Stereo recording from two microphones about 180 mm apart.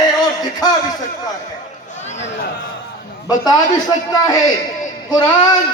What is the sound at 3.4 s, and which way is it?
A man's voice, 20° left (ahead or behind).